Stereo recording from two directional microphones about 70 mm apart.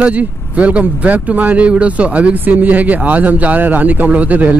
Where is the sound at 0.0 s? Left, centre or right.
Centre.